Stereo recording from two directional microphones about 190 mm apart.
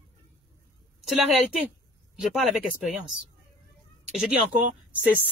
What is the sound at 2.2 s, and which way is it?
Speech, centre (ahead or behind).